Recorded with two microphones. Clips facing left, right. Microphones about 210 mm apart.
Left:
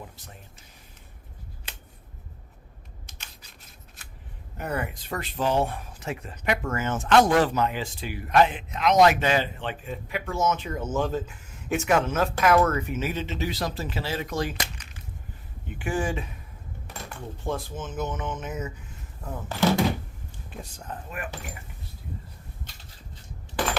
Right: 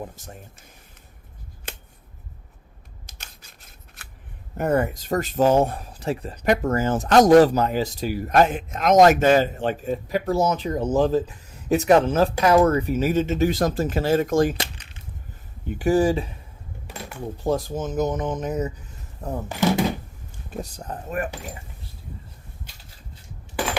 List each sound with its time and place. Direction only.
0.2 s speech: 45° right (ahead or behind)
4.5 s speech: 45° right (ahead or behind)
14.6 s coin: 30° right (ahead or behind)
15.7 s speech: 40° right (ahead or behind)
16.9 s dishes: 10° right (ahead or behind)
17.4 s speech: 40° right (ahead or behind)
19.5 s speech: 15° right (ahead or behind)
20.3 s speech: 40° right (ahead or behind)